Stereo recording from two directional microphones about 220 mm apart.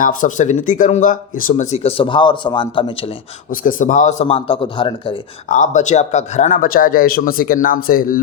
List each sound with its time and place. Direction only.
0.0 s speech: 40° left (ahead or behind); by 2.9 s 20° left (ahead or behind)
3.5 s a man's voice: 40° left (ahead or behind); by 5.1 s 20° left (ahead or behind)
5.5 s speech: 35° left (ahead or behind)